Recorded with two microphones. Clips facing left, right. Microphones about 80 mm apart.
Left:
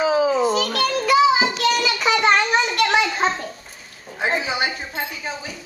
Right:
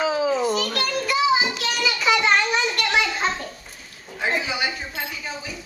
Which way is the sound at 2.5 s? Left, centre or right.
Left.